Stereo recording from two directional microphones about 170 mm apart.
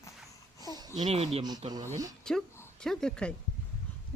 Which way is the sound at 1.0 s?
35° right (ahead or behind).